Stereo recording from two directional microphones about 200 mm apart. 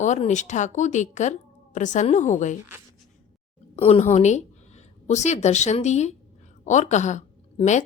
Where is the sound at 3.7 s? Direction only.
30° left (ahead or behind).